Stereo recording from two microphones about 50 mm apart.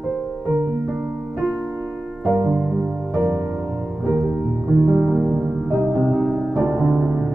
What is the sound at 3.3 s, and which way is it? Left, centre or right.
Music, right.